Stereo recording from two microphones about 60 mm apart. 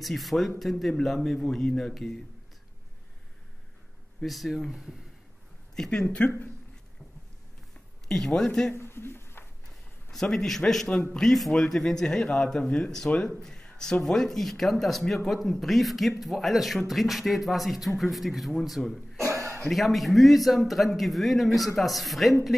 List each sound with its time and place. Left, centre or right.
0.0 s speech: centre
4.2 s speech: centre
5.8 s a man's voice: centre
8.3 s a man's voice: centre
8.7 s a sound: left
10.1 s a man's voice: centre
19.1 s cough: right
19.6 s speech: centre